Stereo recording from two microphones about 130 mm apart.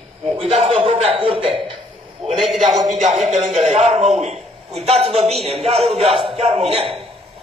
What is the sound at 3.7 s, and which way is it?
A man's voice, 60° right (ahead or behind).